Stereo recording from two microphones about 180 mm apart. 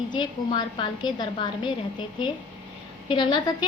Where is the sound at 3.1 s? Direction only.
25° left (ahead or behind).